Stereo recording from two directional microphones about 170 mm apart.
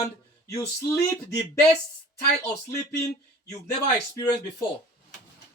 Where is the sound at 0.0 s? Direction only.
20° left (ahead or behind).